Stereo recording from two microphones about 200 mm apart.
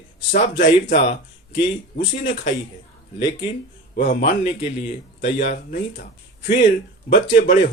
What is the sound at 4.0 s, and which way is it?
A man's voice, 45° left (ahead or behind).